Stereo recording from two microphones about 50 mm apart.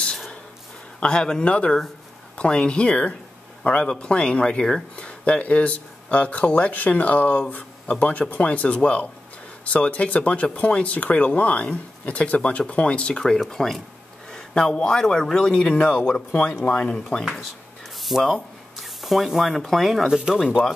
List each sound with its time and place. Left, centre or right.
1.0 s a man's voice: centre
13.5 s speech: centre
14.3 s speech: centre
16.3 s speech: left
16.6 s speech: left
18.0 s rub: centre
19.6 s speech: centre
20.1 s speech: centre